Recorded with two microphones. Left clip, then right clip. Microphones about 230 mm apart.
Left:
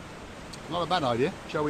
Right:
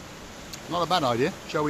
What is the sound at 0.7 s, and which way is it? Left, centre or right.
Speech, right.